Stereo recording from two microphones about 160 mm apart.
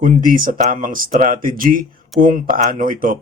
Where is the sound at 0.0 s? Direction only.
60° right (ahead or behind).